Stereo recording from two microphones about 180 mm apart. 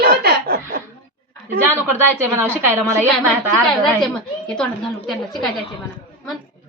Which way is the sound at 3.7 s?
5° left (ahead or behind).